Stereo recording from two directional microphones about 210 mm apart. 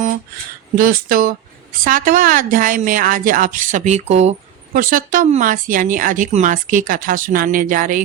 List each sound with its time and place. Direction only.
0.8 s speech: 45° right (ahead or behind)